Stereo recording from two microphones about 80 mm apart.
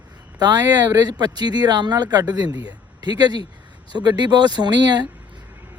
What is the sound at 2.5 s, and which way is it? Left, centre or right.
Speech, left.